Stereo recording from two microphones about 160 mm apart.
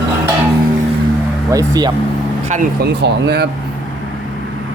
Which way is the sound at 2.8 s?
90° right.